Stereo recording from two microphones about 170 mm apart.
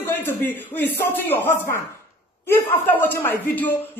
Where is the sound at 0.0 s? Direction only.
15° left (ahead or behind).